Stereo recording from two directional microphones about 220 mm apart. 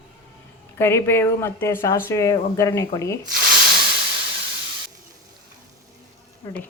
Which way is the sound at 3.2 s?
40° right (ahead or behind).